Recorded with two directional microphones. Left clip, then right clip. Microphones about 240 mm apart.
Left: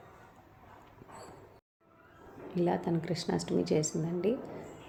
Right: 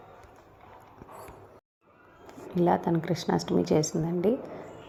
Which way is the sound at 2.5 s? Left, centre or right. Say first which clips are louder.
Right 6 dB; centre.